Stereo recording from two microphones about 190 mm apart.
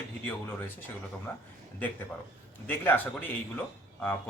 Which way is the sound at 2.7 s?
10° left (ahead or behind).